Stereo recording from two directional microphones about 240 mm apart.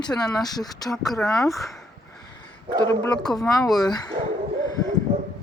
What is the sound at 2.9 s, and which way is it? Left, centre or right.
Speech, centre.